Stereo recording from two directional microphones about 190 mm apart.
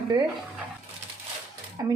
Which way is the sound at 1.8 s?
20° right (ahead or behind).